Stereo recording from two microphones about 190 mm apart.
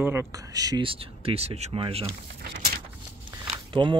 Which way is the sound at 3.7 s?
25° right (ahead or behind).